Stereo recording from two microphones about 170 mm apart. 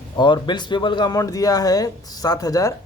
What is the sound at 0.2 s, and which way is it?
Speech, 25° left (ahead or behind).